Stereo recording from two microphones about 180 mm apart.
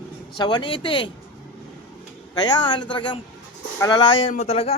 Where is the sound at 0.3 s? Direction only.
25° left (ahead or behind).